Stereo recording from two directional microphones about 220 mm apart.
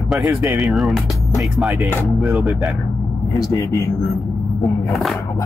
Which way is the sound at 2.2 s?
Centre (ahead or behind).